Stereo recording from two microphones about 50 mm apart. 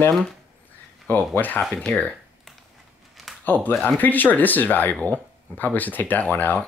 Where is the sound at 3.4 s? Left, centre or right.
Left.